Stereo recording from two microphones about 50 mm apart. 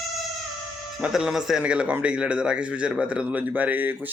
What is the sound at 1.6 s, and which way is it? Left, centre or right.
A man's voice, right.